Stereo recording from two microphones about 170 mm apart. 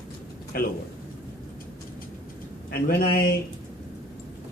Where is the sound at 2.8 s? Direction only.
65° left (ahead or behind).